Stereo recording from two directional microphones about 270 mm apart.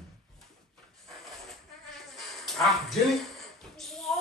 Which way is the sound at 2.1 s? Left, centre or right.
Centre.